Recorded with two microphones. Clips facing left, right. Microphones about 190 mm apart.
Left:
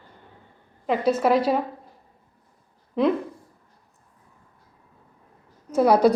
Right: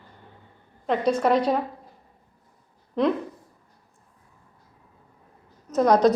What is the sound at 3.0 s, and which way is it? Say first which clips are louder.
Speech: left 1 dB; 5° left (ahead or behind).